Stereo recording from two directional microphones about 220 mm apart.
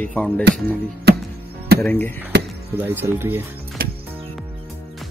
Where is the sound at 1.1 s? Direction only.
50° right (ahead or behind).